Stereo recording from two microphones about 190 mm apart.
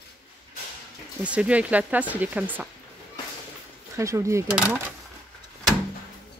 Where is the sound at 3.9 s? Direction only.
15° right (ahead or behind).